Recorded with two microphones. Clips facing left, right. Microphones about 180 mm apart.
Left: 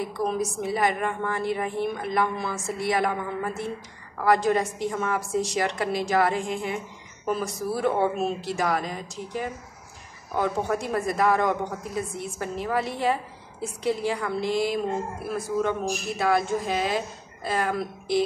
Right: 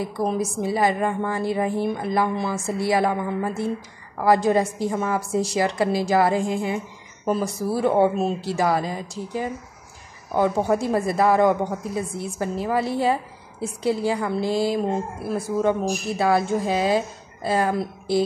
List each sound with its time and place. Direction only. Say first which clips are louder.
0.2 s a woman's voice: right 3 dB; 30° right (ahead or behind)